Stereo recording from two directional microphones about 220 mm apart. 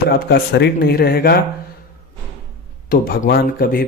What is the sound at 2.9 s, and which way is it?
Speech, 40° left (ahead or behind).